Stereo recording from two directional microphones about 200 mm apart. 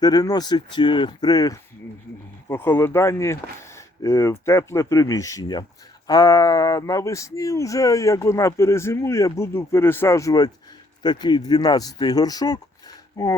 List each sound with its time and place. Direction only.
0.0 s speech: 20° left (ahead or behind)